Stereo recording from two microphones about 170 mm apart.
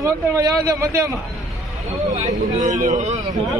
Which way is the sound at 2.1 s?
45° right (ahead or behind).